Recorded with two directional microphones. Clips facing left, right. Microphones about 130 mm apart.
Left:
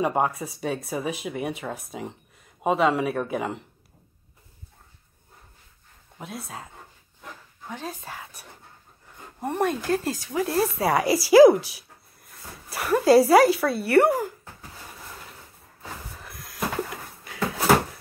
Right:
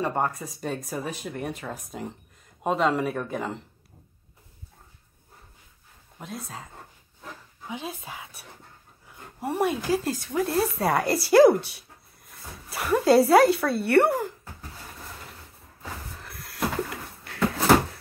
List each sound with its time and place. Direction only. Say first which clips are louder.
0.0 s speech: left 3 dB; 10° left (ahead or behind)
6.1 s speech: left 1 dB; centre (ahead or behind)
16.2 s a sound: right 2 dB; centre (ahead or behind)